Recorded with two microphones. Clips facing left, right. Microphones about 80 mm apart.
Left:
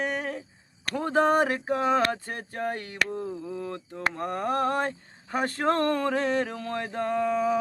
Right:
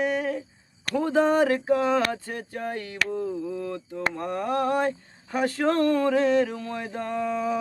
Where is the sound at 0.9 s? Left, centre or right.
Left.